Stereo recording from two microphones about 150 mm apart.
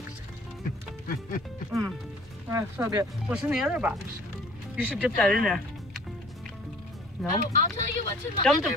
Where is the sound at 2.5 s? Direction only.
20° right (ahead or behind).